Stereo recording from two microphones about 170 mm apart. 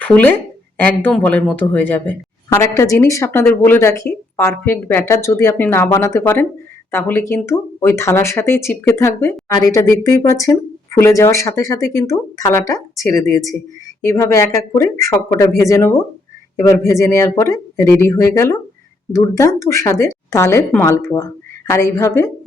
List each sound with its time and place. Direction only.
0.0 s a woman's voice: 10° left (ahead or behind)